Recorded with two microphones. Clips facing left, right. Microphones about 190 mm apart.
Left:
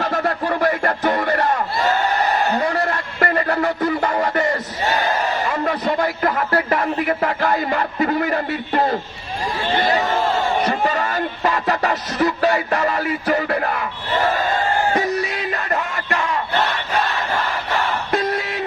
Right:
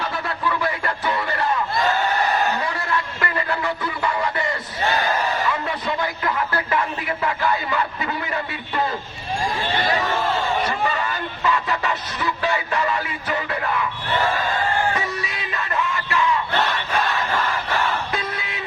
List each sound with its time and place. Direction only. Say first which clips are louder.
0.0 s music: left 5 dB; 45° left (ahead or behind)
2.6 s music: left 5 dB; 40° left (ahead or behind)
5.5 s speech: left 4 dB; 45° left (ahead or behind)
10.6 s music: left 4 dB; 40° left (ahead or behind)
14.9 s music: left 7 dB; 40° left (ahead or behind)
17.8 s a sound: left 5 dB; 45° left (ahead or behind)